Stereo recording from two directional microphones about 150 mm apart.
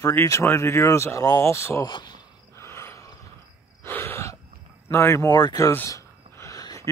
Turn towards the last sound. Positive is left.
turn(degrees=25)  # may be behind; listen again after turning